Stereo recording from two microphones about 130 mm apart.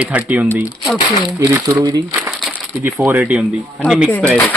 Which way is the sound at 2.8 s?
15° right (ahead or behind).